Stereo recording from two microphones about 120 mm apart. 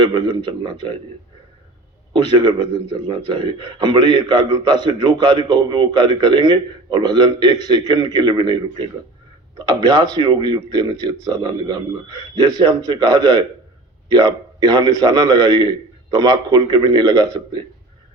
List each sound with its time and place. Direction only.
0.0 s a man's voice: 40° right (ahead or behind)
2.1 s a man's voice: 40° right (ahead or behind)